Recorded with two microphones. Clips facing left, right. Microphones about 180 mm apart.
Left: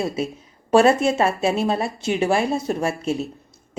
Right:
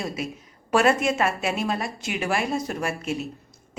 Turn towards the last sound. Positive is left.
turn(degrees=30)  # may be behind; listen again after turning